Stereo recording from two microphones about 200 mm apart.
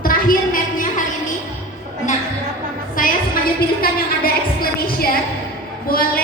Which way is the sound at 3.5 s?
50° left (ahead or behind).